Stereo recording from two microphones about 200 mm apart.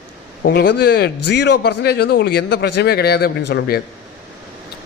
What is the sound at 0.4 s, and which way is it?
Speech, 55° left (ahead or behind).